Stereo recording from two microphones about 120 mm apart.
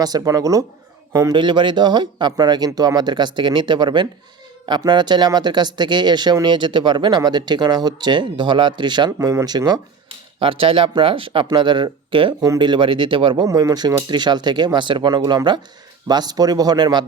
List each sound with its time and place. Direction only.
0.0 s speech: 30° right (ahead or behind)
1.4 s speech: 40° right (ahead or behind)
9.1 s speech: 25° right (ahead or behind)
10.4 s speech: 45° right (ahead or behind)